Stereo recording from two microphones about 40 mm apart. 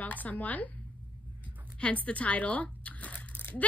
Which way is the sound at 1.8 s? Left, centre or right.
Left.